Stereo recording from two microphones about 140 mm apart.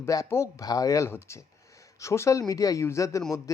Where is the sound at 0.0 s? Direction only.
25° left (ahead or behind).